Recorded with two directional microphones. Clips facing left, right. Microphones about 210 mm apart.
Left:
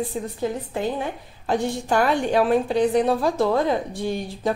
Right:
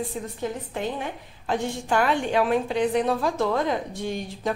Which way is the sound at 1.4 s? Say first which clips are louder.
Left 3 dB; 40° left (ahead or behind).